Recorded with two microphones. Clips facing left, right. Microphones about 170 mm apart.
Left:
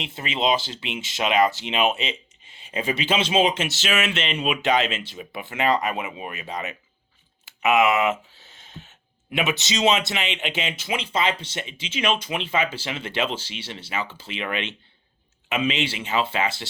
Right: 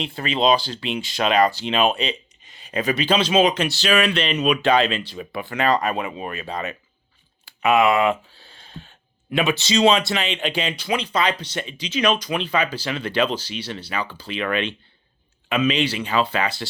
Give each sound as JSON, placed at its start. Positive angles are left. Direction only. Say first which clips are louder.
{"t": 0.5, "sound": "speech", "louder": "right 4 dB", "side_deg": 20}
{"t": 1.6, "sound": "speech", "louder": "right 3 dB", "side_deg": -35}
{"t": 2.8, "sound": "speech", "louder": "right 3 dB", "side_deg": 25}